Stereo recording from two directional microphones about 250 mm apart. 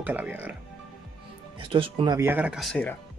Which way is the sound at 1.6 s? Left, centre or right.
Right.